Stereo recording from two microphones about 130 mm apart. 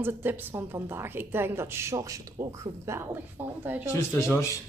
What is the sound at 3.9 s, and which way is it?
Speech, 15° left (ahead or behind).